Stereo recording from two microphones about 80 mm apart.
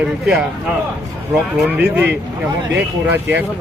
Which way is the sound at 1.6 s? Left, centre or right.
Right.